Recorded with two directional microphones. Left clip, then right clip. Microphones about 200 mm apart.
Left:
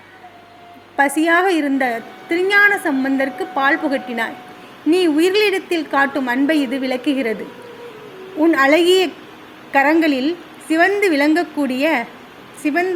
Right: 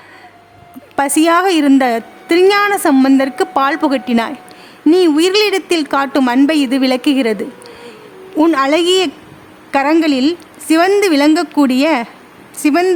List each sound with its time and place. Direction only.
0.9 s a woman's voice: 30° right (ahead or behind)
8.4 s a woman's voice: 35° right (ahead or behind)